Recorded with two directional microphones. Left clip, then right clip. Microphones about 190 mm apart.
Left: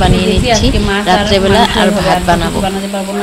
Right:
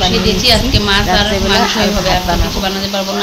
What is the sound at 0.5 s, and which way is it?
Speech, 20° left (ahead or behind).